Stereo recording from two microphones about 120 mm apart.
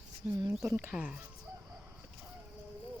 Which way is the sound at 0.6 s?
25° right (ahead or behind).